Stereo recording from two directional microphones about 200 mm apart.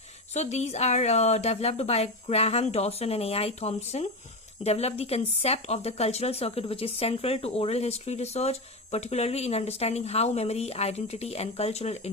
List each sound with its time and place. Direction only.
0.3 s speech: 35° left (ahead or behind)